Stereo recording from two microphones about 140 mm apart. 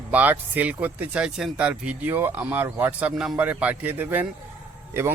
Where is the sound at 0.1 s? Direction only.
10° right (ahead or behind).